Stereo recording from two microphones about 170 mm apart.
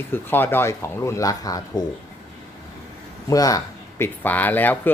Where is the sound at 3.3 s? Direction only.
20° left (ahead or behind).